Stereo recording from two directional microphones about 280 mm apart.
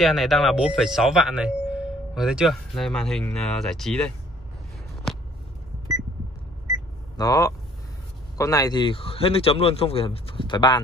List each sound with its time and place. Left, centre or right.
0.0 s speech: centre
7.2 s speech: centre